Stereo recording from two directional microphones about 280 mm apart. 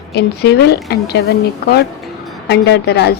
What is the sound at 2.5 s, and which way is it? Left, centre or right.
Speech, left.